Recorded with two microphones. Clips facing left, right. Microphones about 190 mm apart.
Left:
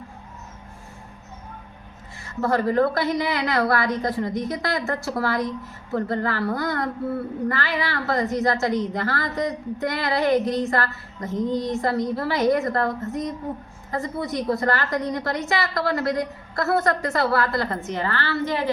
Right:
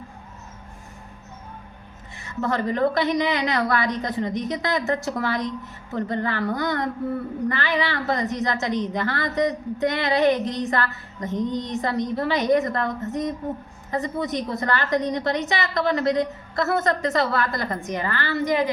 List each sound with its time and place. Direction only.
2.2 s a woman's voice: 20° right (ahead or behind)